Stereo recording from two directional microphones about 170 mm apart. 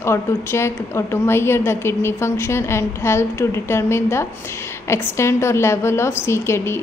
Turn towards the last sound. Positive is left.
turn(degrees=15)  # may be behind; listen again after turning